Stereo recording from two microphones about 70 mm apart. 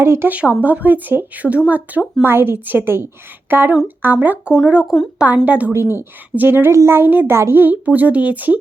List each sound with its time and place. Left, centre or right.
0.0 s a woman's voice: right
0.3 s speech: centre
2.2 s a woman's voice: right
5.7 s a woman's voice: right